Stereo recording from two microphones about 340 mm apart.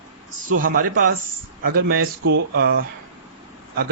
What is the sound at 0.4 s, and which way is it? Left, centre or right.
Speech, right.